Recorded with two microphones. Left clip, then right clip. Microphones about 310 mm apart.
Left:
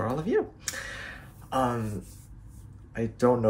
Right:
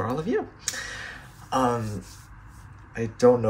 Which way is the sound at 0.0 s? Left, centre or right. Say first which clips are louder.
Even; centre.